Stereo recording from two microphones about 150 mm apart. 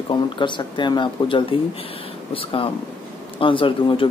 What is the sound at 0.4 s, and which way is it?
Speech, 30° left (ahead or behind).